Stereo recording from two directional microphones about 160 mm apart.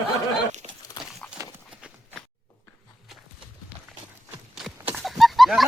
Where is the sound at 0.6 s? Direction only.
40° right (ahead or behind).